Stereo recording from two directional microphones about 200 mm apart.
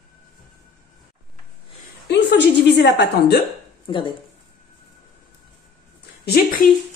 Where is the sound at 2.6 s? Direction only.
60° left (ahead or behind).